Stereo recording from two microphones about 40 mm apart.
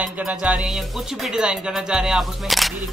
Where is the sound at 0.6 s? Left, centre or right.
Centre.